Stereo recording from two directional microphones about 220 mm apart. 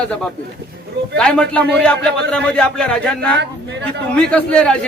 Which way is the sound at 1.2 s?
5° left (ahead or behind).